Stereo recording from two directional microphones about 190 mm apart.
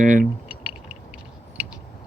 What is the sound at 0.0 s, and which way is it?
Speech, 45° right (ahead or behind).